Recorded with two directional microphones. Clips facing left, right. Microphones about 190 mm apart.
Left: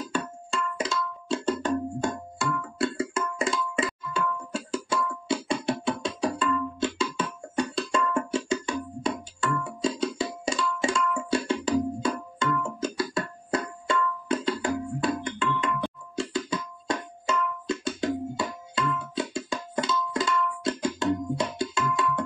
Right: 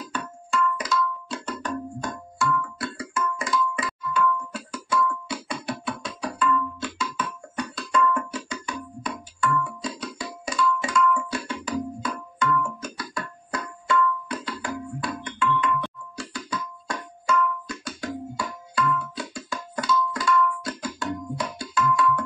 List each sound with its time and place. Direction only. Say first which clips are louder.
0.1 s music: right 5 dB; 30° left (ahead or behind)